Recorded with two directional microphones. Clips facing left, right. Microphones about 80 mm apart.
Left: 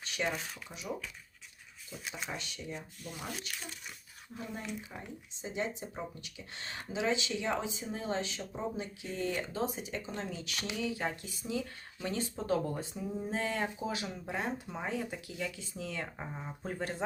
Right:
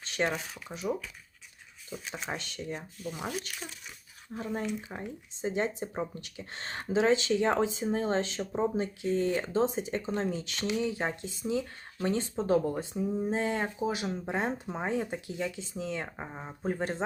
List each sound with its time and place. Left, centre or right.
0.2 s speech: right
0.7 s speech: right
1.9 s speech: centre
4.9 s speech: right
12.5 s speech: right